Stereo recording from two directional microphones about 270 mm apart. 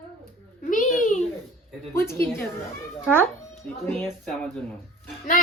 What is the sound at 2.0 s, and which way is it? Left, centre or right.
Speech, centre.